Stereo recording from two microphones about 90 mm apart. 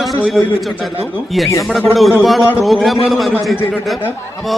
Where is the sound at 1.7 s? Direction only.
Centre (ahead or behind).